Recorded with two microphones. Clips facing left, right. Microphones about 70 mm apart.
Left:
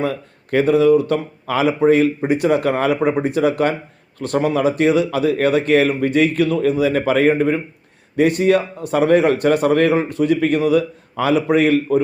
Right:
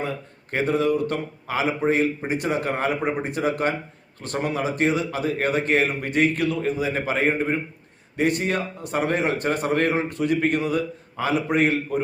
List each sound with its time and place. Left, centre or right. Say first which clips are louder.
0.5 s a man's voice: left 9 dB; left
5.9 s speech: left 6 dB; left
6.6 s a man's voice: left 8 dB; left